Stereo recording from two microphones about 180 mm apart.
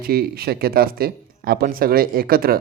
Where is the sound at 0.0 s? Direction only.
60° right (ahead or behind).